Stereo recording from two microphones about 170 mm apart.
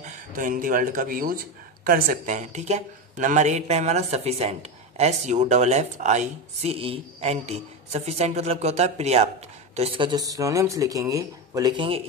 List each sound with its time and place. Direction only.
0.4 s speech: 50° right (ahead or behind)
9.8 s speech: 30° right (ahead or behind)